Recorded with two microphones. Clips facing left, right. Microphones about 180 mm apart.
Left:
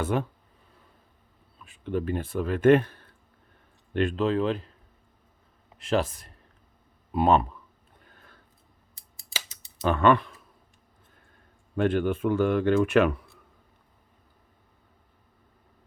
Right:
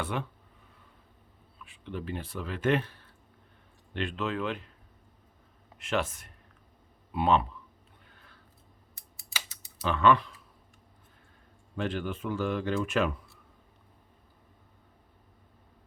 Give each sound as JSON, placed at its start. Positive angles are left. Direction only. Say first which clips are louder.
{"t": 0.0, "sound": "speech", "louder": "left 6 dB", "side_deg": 45}
{"t": 1.5, "sound": "speech", "louder": "left 9 dB", "side_deg": 45}
{"t": 5.7, "sound": "speech", "louder": "left 5 dB", "side_deg": 35}
{"t": 8.0, "sound": "a sound", "louder": "left 5 dB", "side_deg": 45}
{"t": 9.8, "sound": "speech", "louder": "left 3 dB", "side_deg": 50}
{"t": 11.8, "sound": "speech", "louder": "left 8 dB", "side_deg": 55}